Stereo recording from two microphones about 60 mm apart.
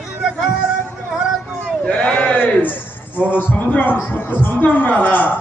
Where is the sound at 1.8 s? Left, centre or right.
Centre.